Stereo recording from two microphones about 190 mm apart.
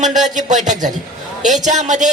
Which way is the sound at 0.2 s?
40° right (ahead or behind).